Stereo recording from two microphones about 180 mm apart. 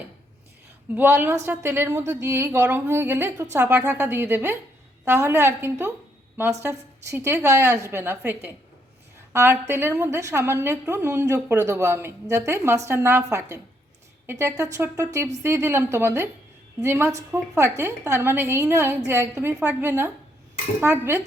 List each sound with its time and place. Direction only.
0.9 s a woman's voice: 10° right (ahead or behind)